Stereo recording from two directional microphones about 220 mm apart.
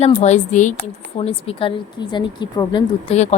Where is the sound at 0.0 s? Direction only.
30° left (ahead or behind).